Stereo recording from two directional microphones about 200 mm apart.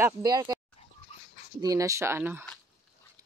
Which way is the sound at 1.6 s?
15° right (ahead or behind).